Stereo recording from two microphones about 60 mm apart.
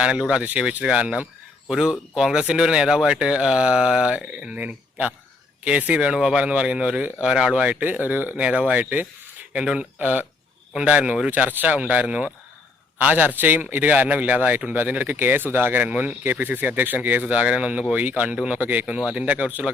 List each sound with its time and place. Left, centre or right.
0.0 s speech: centre
9.5 s speech: centre
10.0 s speech: right
15.8 s speech: right